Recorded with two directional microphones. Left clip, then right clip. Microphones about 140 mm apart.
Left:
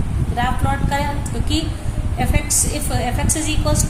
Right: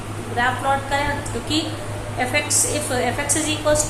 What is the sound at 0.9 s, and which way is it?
Speech, 50° left (ahead or behind).